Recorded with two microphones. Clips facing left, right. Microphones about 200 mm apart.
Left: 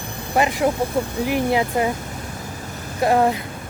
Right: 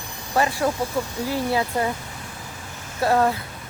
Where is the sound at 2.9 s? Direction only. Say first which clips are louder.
Left 2 dB; 15° left (ahead or behind).